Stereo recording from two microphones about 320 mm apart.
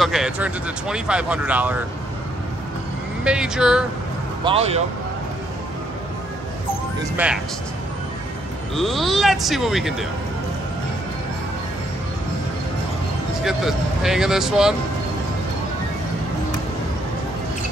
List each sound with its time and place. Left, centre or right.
0.0 s speech: centre
3.3 s speech: centre
4.5 s speech: centre
8.7 s speech: centre
13.4 s speech: centre